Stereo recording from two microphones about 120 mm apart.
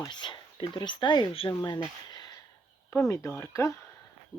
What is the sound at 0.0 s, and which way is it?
Speech, 40° left (ahead or behind).